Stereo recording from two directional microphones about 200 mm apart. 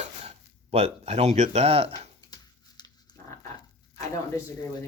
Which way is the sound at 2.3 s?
20° left (ahead or behind).